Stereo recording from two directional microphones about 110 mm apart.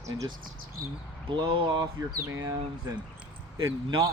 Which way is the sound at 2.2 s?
25° right (ahead or behind).